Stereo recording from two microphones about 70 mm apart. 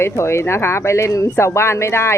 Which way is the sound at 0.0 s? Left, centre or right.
Left.